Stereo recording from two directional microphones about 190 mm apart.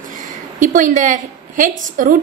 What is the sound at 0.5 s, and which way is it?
A woman's voice, 45° right (ahead or behind).